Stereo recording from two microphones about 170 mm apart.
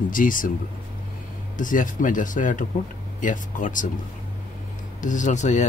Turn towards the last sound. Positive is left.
turn(degrees=45)  # may be behind; listen again after turning